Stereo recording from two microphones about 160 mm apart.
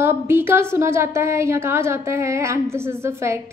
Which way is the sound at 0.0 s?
15° right (ahead or behind).